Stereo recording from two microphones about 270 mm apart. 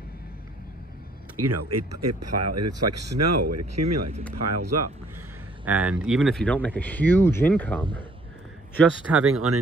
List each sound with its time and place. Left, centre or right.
1.3 s speech: right
5.7 s speech: centre
9.2 s speech: right